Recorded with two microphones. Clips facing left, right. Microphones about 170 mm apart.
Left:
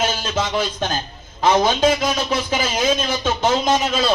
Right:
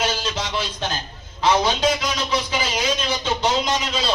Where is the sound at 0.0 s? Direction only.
50° left (ahead or behind).